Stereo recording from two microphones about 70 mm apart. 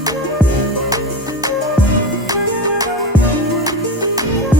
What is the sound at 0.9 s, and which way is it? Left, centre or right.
Music, right.